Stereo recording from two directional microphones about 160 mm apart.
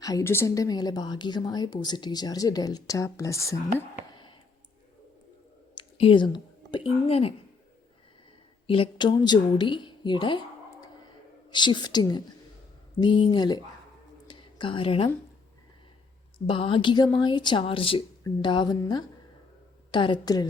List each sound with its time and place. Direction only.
0.0 s a woman's voice: 20° left (ahead or behind)
4.1 s a sound: 30° left (ahead or behind)
5.7 s a woman's voice: 30° left (ahead or behind)
8.6 s a woman's voice: 35° left (ahead or behind)
14.3 s whispering: 30° left (ahead or behind)
16.5 s a woman's voice: 35° left (ahead or behind)